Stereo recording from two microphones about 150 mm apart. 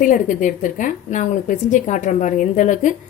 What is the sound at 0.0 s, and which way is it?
A woman's voice, 60° left (ahead or behind).